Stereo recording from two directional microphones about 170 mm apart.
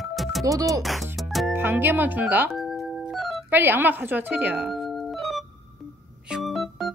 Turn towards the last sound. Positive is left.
turn(degrees=0)  # may be behind; listen again after turning